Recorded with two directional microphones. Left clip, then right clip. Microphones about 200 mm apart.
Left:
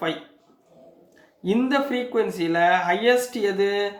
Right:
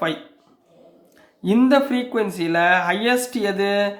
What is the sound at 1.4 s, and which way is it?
Speech, 35° right (ahead or behind).